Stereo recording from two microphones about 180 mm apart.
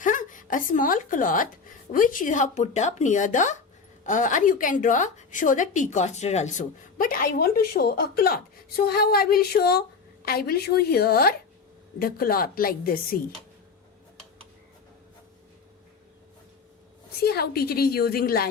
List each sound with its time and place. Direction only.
0.0 s a woman's voice: 45° left (ahead or behind)
17.2 s a woman's voice: 60° left (ahead or behind)